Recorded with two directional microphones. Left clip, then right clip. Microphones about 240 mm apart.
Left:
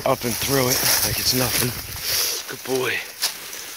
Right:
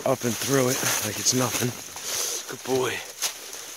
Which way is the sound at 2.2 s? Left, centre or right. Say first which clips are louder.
Left 5 dB; centre.